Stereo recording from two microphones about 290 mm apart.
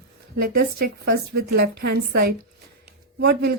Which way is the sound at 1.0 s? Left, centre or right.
Right.